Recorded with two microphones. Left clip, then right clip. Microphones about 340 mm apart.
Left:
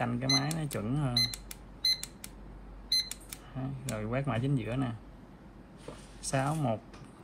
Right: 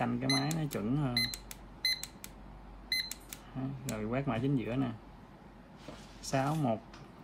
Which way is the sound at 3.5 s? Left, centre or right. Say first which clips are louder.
Left 1 dB; left.